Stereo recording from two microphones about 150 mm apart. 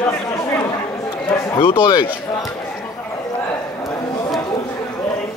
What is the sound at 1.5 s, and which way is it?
Speech, 35° left (ahead or behind).